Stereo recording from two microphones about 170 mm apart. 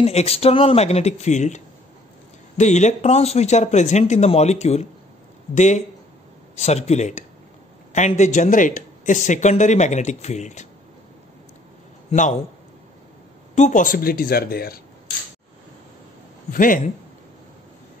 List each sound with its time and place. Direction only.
0.0 s speech: 35° left (ahead or behind)
12.1 s a man's voice: 45° left (ahead or behind)
13.6 s speech: 45° left (ahead or behind); by 14.8 s 65° left (ahead or behind)
16.5 s speech: 50° left (ahead or behind)